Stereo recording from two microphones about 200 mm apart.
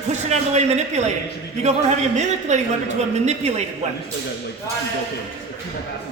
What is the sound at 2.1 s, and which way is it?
A woman's voice, 35° right (ahead or behind).